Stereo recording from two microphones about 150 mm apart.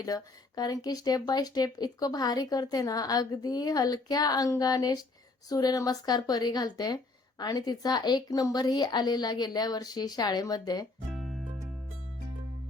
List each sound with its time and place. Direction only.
0.0 s speech: 25° left (ahead or behind)
11.1 s music: centre (ahead or behind)